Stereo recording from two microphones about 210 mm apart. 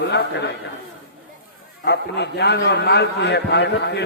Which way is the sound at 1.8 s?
50° left (ahead or behind).